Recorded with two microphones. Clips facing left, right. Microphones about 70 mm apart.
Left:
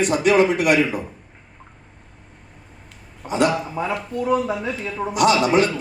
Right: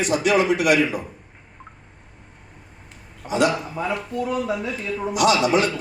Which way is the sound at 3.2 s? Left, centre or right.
Left.